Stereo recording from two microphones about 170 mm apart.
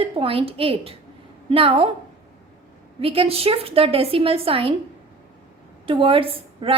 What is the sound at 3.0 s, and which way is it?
A woman's voice, 35° right (ahead or behind).